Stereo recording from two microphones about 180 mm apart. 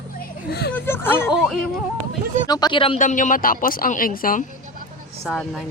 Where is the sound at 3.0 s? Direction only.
45° left (ahead or behind).